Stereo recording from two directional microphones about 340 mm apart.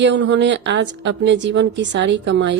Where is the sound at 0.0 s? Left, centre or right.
Right.